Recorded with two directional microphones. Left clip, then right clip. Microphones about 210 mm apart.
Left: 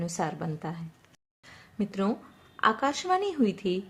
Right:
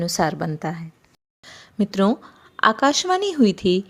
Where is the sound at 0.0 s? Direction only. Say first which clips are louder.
Right 10 dB; 35° right (ahead or behind).